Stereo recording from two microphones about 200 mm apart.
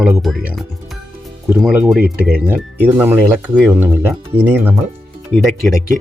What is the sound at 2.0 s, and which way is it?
Speech, 50° right (ahead or behind).